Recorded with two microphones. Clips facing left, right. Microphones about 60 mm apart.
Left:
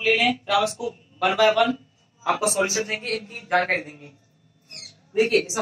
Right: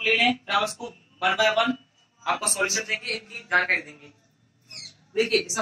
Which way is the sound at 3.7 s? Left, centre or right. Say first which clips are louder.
Left 1 dB; left.